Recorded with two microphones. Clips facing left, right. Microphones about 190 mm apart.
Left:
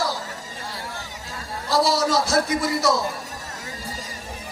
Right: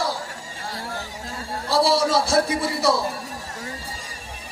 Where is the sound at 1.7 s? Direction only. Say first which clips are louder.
Right 1 dB; 30° right (ahead or behind).